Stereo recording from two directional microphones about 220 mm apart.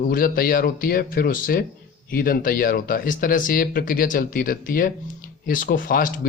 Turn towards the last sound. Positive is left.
turn(degrees=40)  # may be behind; listen again after turning